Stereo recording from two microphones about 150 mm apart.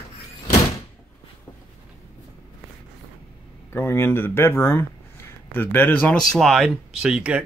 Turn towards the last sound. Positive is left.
turn(degrees=-5)  # may be behind; listen again after turning